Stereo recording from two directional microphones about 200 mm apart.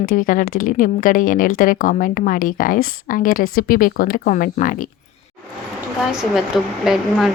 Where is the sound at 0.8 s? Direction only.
45° left (ahead or behind).